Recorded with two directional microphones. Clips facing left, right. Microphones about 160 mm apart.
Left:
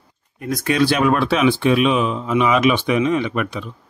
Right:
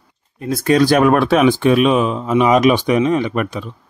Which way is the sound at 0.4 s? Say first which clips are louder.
Right 4 dB; 30° right (ahead or behind).